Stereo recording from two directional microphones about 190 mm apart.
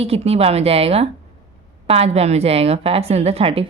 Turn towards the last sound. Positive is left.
turn(degrees=-30)  # may be behind; listen again after turning